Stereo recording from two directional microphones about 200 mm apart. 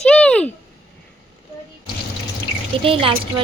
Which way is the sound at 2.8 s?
25° right (ahead or behind).